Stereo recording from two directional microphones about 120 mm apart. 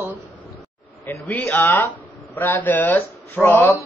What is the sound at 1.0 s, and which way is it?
Speech, 20° left (ahead or behind).